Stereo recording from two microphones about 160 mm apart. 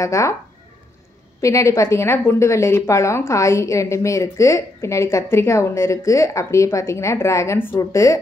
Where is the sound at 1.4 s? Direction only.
20° left (ahead or behind).